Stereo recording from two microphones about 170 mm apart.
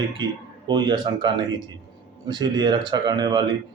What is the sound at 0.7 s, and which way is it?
Speech, 25° right (ahead or behind).